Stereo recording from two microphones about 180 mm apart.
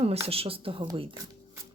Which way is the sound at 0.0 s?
35° right (ahead or behind).